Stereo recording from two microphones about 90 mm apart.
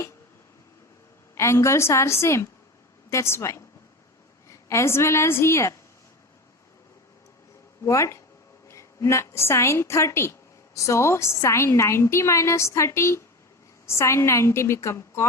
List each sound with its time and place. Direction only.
1.4 s a woman's voice: 30° left (ahead or behind)
7.9 s a woman's voice: 35° left (ahead or behind)